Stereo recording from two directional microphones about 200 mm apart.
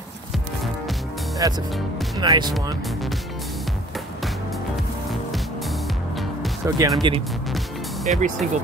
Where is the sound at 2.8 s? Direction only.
Centre (ahead or behind).